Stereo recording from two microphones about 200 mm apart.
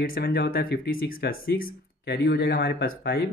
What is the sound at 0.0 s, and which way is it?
Speech, 50° left (ahead or behind).